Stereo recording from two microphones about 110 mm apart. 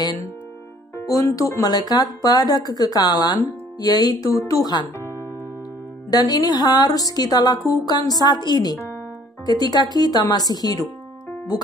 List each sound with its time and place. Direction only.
0.9 s speech: 30° left (ahead or behind)
6.0 s speech: 35° left (ahead or behind)